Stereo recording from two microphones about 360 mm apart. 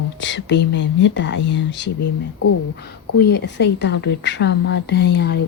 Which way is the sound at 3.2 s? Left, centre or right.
Left.